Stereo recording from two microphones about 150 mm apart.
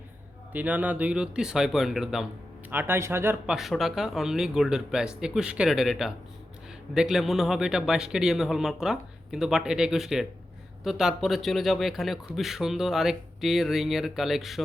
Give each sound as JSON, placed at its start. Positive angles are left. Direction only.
{"t": 0.5, "sound": "speech", "side_deg": -10}
{"t": 2.6, "sound": "speech", "side_deg": -15}
{"t": 3.4, "sound": "speech", "side_deg": -5}